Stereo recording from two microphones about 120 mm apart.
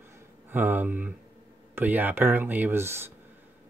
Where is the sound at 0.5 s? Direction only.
15° right (ahead or behind).